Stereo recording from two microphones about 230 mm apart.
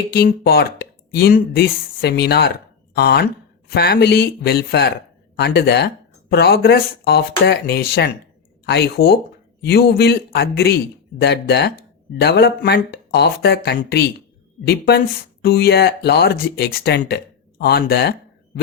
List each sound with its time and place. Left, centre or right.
0.1 s speech: left